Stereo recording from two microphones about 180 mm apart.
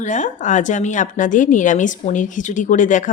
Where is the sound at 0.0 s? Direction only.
45° left (ahead or behind).